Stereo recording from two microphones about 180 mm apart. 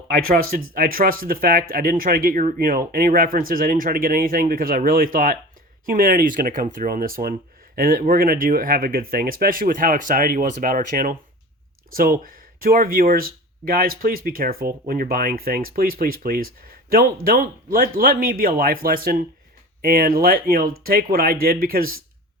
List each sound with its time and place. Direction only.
0.3 s speech: 55° right (ahead or behind)
12.2 s speech: 50° right (ahead or behind)